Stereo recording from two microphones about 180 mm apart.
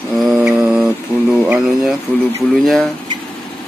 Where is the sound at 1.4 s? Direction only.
5° right (ahead or behind).